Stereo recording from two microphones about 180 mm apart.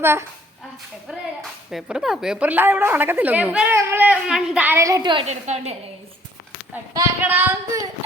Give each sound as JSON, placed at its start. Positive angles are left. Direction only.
{"t": 0.0, "sound": "speech", "side_deg": -15}
{"t": 1.0, "sound": "speech", "side_deg": 0}
{"t": 5.2, "sound": "a woman's voice", "side_deg": -40}
{"t": 7.2, "sound": "speech", "side_deg": -10}